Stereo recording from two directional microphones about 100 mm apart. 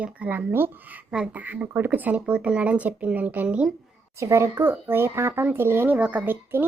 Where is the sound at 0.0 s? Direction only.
15° right (ahead or behind).